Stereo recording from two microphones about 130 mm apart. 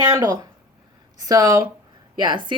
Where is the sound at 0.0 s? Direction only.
30° right (ahead or behind).